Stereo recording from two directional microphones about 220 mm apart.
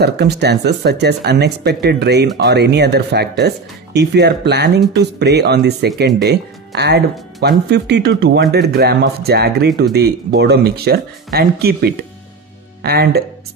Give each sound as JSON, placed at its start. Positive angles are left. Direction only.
{"t": 0.0, "sound": "speech", "side_deg": -50}